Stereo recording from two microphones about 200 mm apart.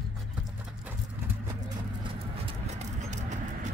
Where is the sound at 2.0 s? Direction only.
30° right (ahead or behind).